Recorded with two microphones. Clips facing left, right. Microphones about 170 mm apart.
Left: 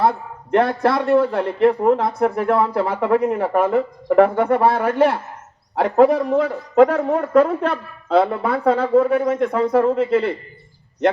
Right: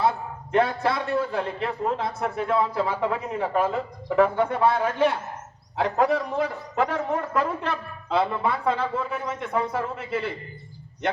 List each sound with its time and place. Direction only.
0.0 s a man's voice: 65° left (ahead or behind)